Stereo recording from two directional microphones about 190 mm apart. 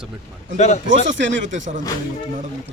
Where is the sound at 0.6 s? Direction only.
35° left (ahead or behind).